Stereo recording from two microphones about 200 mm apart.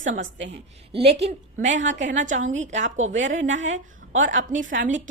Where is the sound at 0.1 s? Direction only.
70° right (ahead or behind).